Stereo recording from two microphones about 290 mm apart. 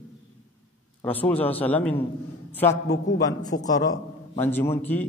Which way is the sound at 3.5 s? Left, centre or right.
Left.